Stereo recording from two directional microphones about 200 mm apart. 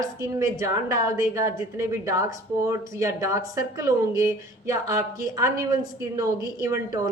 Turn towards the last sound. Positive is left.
turn(degrees=-15)  # may be behind; listen again after turning